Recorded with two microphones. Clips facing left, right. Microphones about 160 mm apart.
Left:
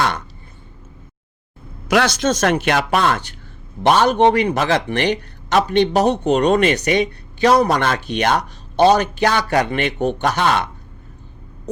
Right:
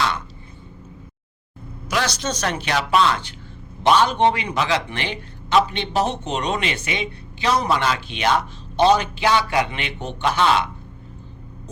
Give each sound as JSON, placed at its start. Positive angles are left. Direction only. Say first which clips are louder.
{"t": 1.9, "sound": "speech", "louder": "left 7 dB", "side_deg": 55}